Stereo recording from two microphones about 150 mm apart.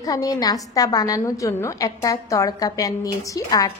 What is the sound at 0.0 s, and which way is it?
A woman's voice, 25° left (ahead or behind).